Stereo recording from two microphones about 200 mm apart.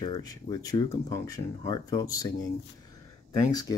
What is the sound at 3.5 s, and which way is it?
Speech, 20° left (ahead or behind).